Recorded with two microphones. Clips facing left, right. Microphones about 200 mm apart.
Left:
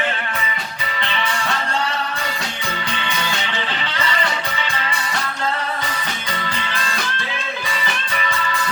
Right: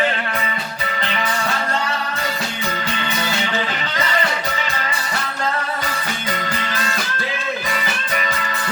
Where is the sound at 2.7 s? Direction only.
40° right (ahead or behind).